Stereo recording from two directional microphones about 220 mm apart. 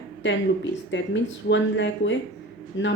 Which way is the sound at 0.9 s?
55° left (ahead or behind).